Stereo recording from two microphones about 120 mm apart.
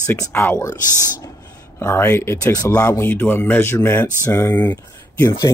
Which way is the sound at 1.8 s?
20° left (ahead or behind).